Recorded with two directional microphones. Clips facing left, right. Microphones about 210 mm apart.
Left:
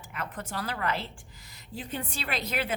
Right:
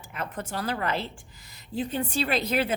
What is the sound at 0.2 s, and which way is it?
Speech, 25° right (ahead or behind).